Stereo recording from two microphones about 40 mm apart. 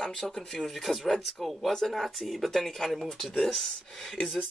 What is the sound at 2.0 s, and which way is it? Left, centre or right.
Speech, centre.